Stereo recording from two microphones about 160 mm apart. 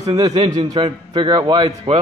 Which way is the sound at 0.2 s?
45° right (ahead or behind).